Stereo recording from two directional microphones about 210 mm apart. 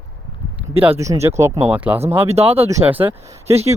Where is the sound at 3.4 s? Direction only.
30° right (ahead or behind).